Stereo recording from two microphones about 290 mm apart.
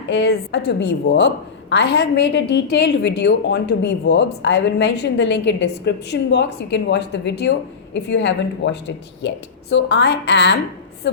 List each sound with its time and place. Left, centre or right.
0.1 s a woman's voice: left